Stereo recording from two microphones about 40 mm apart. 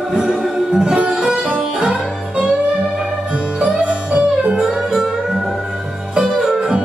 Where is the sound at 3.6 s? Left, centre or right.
Right.